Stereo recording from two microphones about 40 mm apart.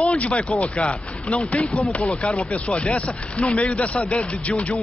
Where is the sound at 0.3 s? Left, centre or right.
Left.